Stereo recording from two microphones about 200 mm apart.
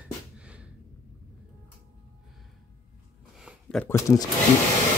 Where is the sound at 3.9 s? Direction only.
15° left (ahead or behind).